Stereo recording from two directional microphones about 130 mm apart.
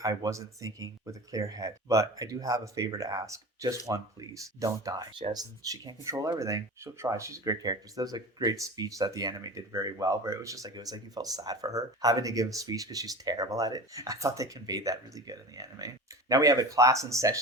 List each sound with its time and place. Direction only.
0.0 s speech: 25° right (ahead or behind)